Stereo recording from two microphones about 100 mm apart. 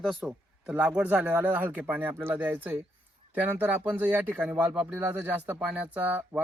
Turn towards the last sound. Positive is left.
turn(degrees=-15)  # may be behind; listen again after turning